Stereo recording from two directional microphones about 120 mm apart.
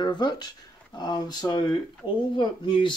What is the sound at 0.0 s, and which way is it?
Speech, 40° left (ahead or behind).